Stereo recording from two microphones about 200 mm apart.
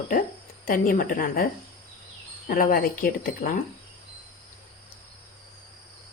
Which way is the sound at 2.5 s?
45° left (ahead or behind).